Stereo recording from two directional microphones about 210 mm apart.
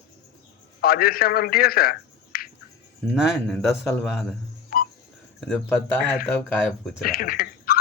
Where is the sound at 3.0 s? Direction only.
5° right (ahead or behind).